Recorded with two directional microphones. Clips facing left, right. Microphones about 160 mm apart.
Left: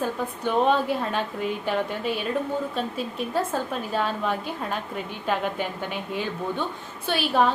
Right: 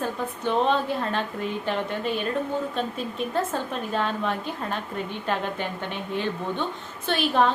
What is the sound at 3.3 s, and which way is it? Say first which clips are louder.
A woman's voice: left 2 dB; 5° left (ahead or behind).